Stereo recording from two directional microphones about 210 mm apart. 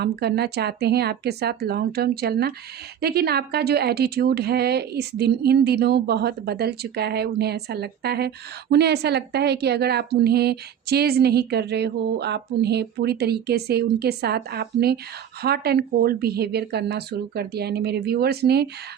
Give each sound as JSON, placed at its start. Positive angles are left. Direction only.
{"t": 0.0, "sound": "a woman's voice", "side_deg": -50}